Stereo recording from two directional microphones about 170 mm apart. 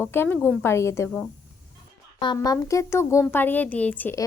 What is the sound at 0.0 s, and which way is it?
A woman's voice, 15° left (ahead or behind).